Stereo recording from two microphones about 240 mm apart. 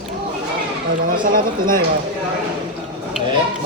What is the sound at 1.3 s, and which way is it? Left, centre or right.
Speech, right.